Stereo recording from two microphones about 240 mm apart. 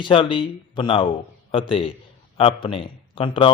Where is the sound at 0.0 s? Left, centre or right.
Left.